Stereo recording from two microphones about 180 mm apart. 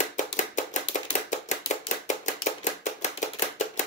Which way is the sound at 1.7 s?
40° left (ahead or behind).